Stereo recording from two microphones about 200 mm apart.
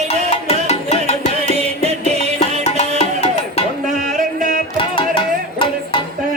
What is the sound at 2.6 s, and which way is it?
Music, 35° left (ahead or behind).